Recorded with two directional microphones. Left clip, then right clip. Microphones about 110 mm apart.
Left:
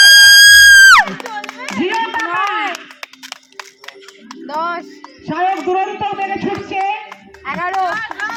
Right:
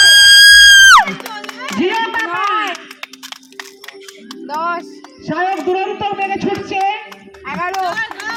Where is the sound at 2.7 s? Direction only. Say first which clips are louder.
Right 1 dB; 35° left (ahead or behind).